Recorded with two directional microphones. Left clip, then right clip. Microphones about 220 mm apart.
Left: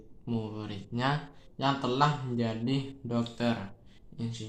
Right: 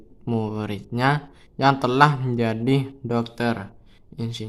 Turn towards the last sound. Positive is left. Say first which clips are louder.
# right 8 dB
turn(degrees=-40)  # may be behind; listen again after turning